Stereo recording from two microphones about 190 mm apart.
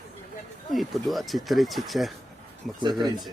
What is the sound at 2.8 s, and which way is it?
Speech, 20° right (ahead or behind).